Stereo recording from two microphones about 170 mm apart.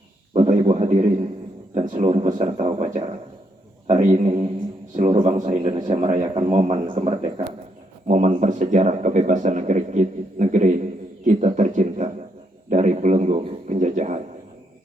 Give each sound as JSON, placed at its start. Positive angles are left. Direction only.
{"t": 0.3, "sound": "a sound", "side_deg": -35}
{"t": 1.7, "sound": "a man's voice", "side_deg": -45}
{"t": 5.0, "sound": "a man's voice", "side_deg": -30}
{"t": 5.4, "sound": "speech", "side_deg": -45}
{"t": 6.5, "sound": "a man's voice", "side_deg": -35}
{"t": 7.2, "sound": "speech", "side_deg": -45}